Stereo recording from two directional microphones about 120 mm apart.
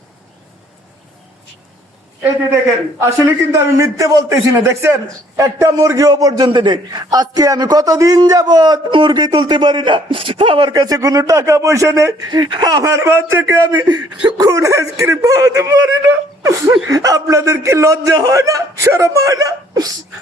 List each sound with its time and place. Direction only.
3.0 s a man's voice: 25° right (ahead or behind)
12.3 s a man's voice: 35° right (ahead or behind)